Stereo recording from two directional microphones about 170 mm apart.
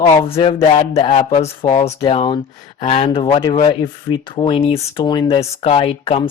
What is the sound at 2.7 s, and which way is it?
Speech, 40° left (ahead or behind).